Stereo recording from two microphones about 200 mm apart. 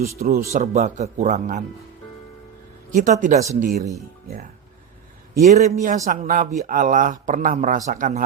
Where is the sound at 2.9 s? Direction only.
40° right (ahead or behind).